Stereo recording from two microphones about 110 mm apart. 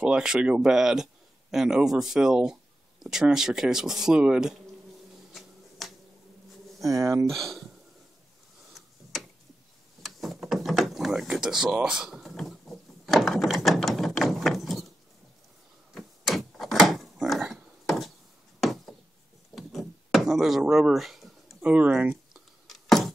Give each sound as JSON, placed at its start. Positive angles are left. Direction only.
{"t": 0.0, "sound": "speech", "side_deg": -5}
{"t": 5.3, "sound": "finger snapping", "side_deg": 0}
{"t": 6.8, "sound": "speech", "side_deg": -30}
{"t": 7.2, "sound": "speech", "side_deg": 0}
{"t": 10.0, "sound": "a sound", "side_deg": 0}
{"t": 15.9, "sound": "door", "side_deg": 0}
{"t": 18.6, "sound": "a sound", "side_deg": 0}
{"t": 20.6, "sound": "speech", "side_deg": -5}
{"t": 21.6, "sound": "a sound", "side_deg": -10}